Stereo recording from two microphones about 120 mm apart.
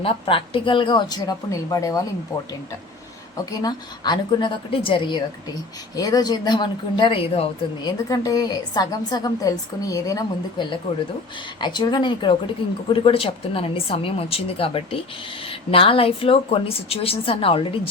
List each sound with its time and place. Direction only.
0.0 s a woman's voice: 45° left (ahead or behind)
6.0 s a woman's voice: 30° left (ahead or behind); by 7.4 s 50° left (ahead or behind)
7.8 s a woman's voice: 35° left (ahead or behind); by 17.7 s 50° left (ahead or behind)